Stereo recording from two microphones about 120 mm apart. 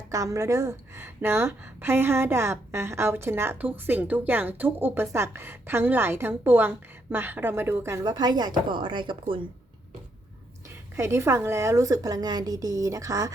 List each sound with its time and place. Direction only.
0.1 s a woman's voice: 25° right (ahead or behind)
8.0 s speech: 35° right (ahead or behind)
10.9 s a woman's voice: 25° right (ahead or behind)